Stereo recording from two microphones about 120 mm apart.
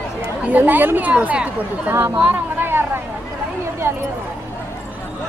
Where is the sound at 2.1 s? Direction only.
15° right (ahead or behind).